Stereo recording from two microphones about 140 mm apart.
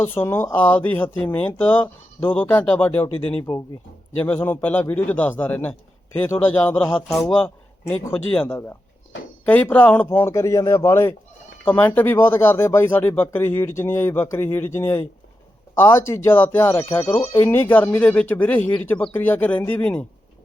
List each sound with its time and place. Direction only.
0.0 s speech: 15° left (ahead or behind)
7.4 s a sound: 10° left (ahead or behind)
8.3 s speech: 10° left (ahead or behind)